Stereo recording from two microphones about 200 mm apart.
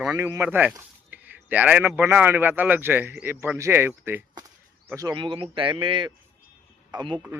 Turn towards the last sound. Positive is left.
turn(degrees=-25)  # may be behind; listen again after turning